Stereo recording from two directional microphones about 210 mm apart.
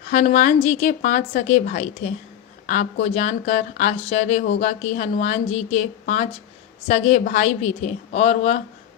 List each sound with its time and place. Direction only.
0.1 s speech: 35° left (ahead or behind)